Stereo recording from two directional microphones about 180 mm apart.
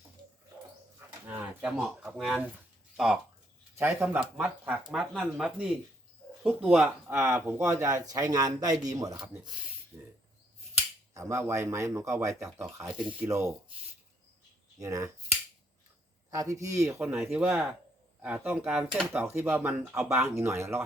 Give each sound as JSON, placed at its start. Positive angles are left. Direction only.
{"t": 0.9, "sound": "a sound", "side_deg": -10}
{"t": 3.8, "sound": "speech", "side_deg": -10}
{"t": 9.9, "sound": "cricket", "side_deg": -15}
{"t": 11.1, "sound": "speech", "side_deg": -15}
{"t": 12.8, "sound": "speech", "side_deg": -5}
{"t": 14.8, "sound": "speech", "side_deg": -15}
{"t": 16.3, "sound": "speech", "side_deg": -15}